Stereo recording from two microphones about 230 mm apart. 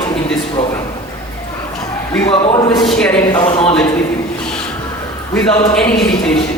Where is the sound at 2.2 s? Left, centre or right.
Left.